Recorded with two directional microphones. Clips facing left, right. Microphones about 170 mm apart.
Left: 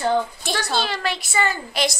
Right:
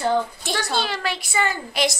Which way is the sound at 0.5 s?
15° right (ahead or behind).